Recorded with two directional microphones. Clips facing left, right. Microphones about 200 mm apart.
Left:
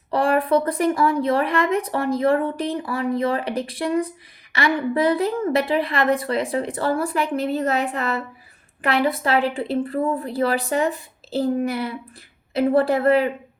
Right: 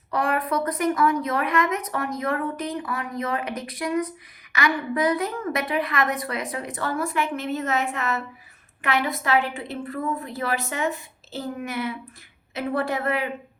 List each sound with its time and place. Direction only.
0.1 s speech: 30° left (ahead or behind)